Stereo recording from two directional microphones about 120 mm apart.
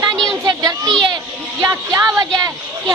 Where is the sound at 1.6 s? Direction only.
30° right (ahead or behind).